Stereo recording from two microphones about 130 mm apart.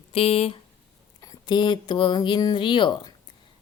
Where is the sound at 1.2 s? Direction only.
30° left (ahead or behind).